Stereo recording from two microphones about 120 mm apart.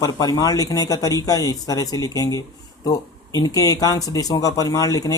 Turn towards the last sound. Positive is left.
turn(degrees=30)  # may be behind; listen again after turning